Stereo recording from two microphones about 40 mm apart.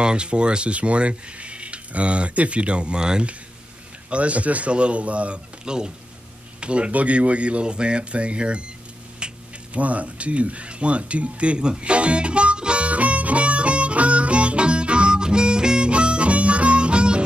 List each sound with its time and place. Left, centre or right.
0.0 s speech: right
4.1 s a man's voice: right
5.7 s speech: right
9.2 s mechanisms: right
9.8 s a sound: right